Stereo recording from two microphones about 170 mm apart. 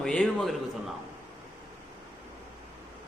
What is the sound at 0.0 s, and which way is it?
Speech, 5° left (ahead or behind).